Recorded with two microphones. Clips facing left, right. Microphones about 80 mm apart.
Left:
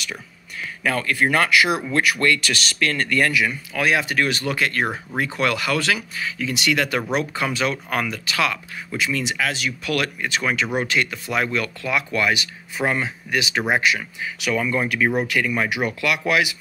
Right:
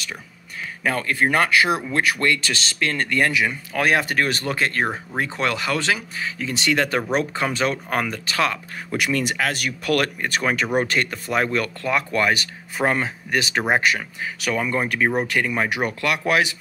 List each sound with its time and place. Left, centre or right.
0.8 s speech: right
3.7 s speech: right
8.9 s speech: right
14.6 s speech: right